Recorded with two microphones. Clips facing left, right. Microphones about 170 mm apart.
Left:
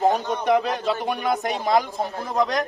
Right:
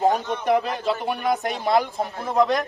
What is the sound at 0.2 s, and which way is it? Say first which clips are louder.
Speech: left 1 dB; 40° left (ahead or behind).